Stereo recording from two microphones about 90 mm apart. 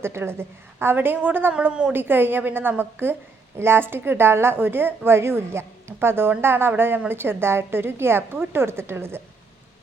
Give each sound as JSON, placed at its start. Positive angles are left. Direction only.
{"t": 0.0, "sound": "a woman's voice", "side_deg": -30}